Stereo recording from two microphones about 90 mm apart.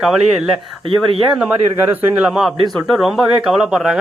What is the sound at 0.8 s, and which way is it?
Speech, 80° right.